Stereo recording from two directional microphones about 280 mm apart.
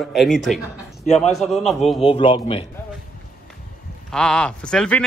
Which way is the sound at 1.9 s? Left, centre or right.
Centre.